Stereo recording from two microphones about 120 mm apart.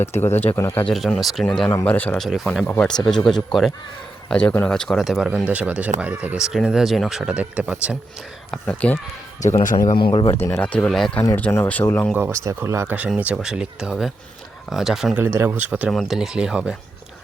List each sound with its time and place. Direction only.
0.0 s speech: 20° left (ahead or behind)
0.9 s speech: centre (ahead or behind)
2.2 s speech: centre (ahead or behind)
2.6 s speech: 10° left (ahead or behind); by 7.9 s 10° right (ahead or behind)
8.6 s speech: 15° left (ahead or behind)
9.4 s speech: 85° left
9.9 s speech: 45° left (ahead or behind)
10.3 s speech: 15° left (ahead or behind)
11.7 s speech: 15° left (ahead or behind)
12.1 s speech: 15° right (ahead or behind)
13.1 s speech: 10° right (ahead or behind)
15.2 s speech: 20° right (ahead or behind)
15.9 s speech: centre (ahead or behind)